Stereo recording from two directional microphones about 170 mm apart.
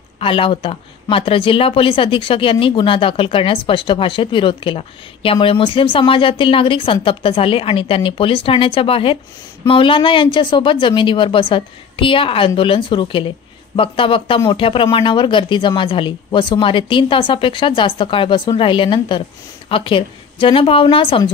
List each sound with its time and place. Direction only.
0.2 s speech: 30° left (ahead or behind)